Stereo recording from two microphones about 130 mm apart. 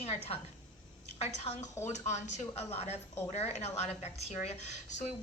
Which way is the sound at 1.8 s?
60° left (ahead or behind).